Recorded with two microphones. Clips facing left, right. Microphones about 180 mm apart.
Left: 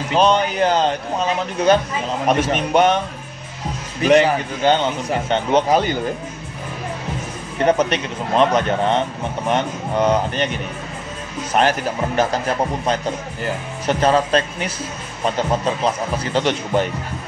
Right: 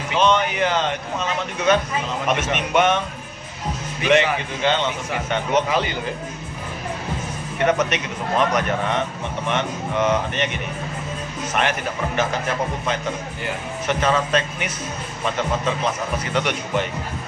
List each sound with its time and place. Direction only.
0.1 s a man's voice: 35° left (ahead or behind)
4.0 s a man's voice: 40° left (ahead or behind)
7.5 s a man's voice: 30° left (ahead or behind)
11.5 s a man's voice: 40° left (ahead or behind)